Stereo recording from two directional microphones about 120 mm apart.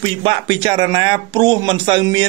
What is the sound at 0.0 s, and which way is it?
Speech, 45° right (ahead or behind).